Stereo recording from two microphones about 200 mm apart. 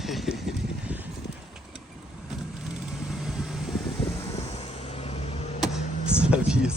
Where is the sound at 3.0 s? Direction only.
Centre (ahead or behind).